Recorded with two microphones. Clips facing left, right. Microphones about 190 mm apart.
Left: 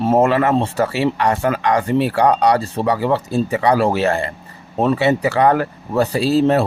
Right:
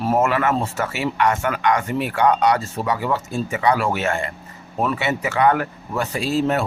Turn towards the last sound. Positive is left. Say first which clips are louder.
# left 6 dB
turn(degrees=35)  # may be behind; listen again after turning